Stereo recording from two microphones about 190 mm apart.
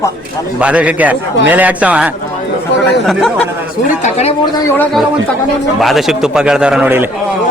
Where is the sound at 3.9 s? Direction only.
35° left (ahead or behind).